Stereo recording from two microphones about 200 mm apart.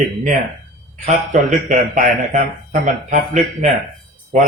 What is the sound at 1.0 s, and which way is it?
A man's voice, 40° right (ahead or behind).